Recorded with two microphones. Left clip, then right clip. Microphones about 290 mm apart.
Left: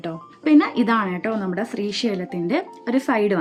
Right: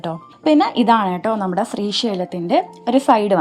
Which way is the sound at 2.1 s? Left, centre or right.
Centre.